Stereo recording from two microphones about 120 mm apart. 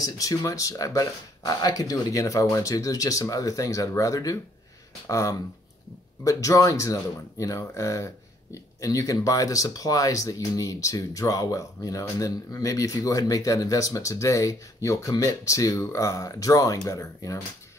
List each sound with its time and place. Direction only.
0.0 s speech: 30° left (ahead or behind)